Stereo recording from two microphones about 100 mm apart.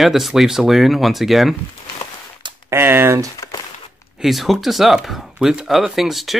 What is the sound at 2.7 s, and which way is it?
Speech, 25° right (ahead or behind).